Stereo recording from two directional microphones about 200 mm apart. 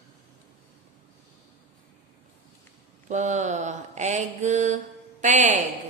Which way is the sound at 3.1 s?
35° right (ahead or behind).